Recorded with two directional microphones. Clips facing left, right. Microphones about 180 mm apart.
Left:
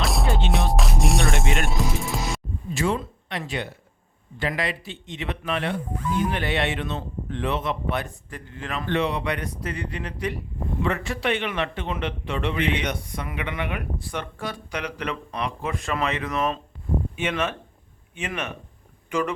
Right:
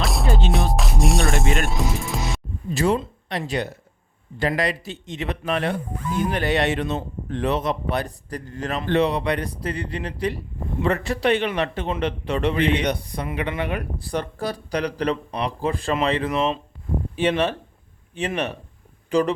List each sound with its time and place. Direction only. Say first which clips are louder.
0.0 s music: right 1 dB; centre (ahead or behind)
2.7 s a man's voice: right 4 dB; 40° right (ahead or behind)